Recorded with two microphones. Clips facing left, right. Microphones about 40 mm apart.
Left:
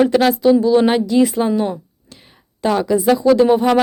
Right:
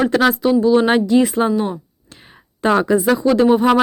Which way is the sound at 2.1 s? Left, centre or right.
Centre.